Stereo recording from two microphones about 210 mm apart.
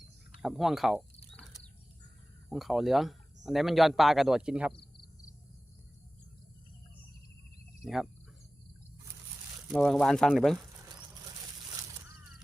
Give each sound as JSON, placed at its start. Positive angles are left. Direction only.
{"t": 0.4, "sound": "speech", "side_deg": 0}
{"t": 2.5, "sound": "speech", "side_deg": 0}
{"t": 4.8, "sound": "cricket", "side_deg": 50}
{"t": 9.6, "sound": "speech", "side_deg": 0}